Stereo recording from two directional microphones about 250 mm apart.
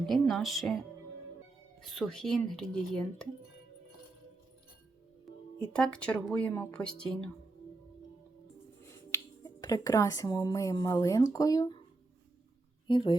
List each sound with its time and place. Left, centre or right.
0.0 s speech: centre
1.9 s speech: centre
5.2 s speech: centre
8.8 s speech: centre
12.9 s speech: centre